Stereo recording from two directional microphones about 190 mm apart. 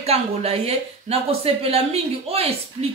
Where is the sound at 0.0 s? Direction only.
30° right (ahead or behind).